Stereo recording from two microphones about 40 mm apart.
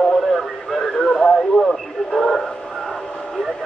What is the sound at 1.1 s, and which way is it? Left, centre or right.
Radio, left.